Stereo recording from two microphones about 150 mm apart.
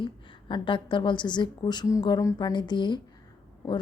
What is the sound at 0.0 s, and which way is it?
A woman's voice, 35° left (ahead or behind).